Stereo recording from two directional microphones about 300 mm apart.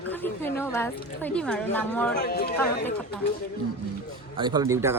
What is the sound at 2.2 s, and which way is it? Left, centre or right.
Speech, left.